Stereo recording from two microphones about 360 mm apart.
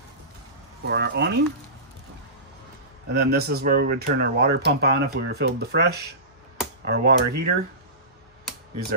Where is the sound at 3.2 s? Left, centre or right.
Right.